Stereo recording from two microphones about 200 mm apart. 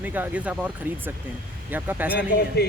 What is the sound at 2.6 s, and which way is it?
Speech, 55° left (ahead or behind).